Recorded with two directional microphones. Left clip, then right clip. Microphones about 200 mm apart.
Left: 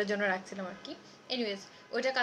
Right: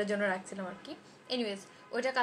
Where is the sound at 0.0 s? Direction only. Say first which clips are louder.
Left 1 dB; 10° left (ahead or behind).